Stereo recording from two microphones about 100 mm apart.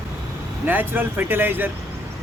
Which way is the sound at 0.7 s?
20° right (ahead or behind).